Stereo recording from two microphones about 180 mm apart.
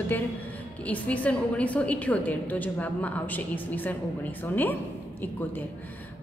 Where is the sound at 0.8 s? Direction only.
10° left (ahead or behind).